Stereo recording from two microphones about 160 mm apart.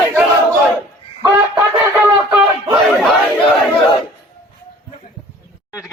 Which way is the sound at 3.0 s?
Centre (ahead or behind).